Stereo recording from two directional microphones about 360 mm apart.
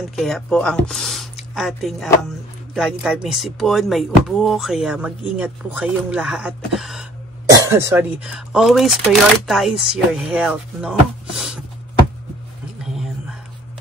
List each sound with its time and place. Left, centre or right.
0.1 s speech: centre